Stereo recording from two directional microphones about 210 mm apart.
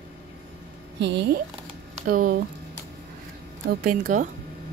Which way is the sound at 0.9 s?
55° right (ahead or behind).